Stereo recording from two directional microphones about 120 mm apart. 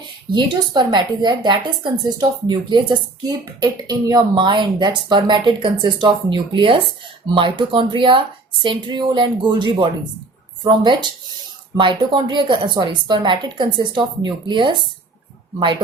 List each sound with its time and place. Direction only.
0.3 s a woman's voice: 40° right (ahead or behind)